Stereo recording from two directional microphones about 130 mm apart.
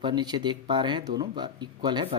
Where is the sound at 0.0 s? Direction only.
35° right (ahead or behind).